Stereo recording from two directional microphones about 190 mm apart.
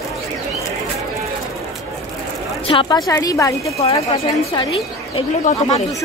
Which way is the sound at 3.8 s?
30° left (ahead or behind).